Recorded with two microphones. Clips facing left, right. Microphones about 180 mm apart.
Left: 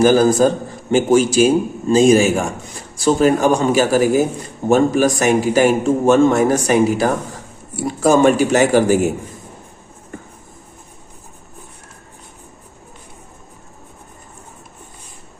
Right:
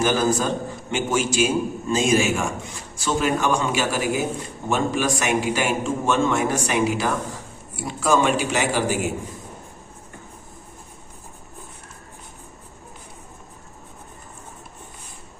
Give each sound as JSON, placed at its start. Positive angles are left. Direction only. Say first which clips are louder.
{"t": 0.0, "sound": "a man's voice", "louder": "left 9 dB", "side_deg": 40}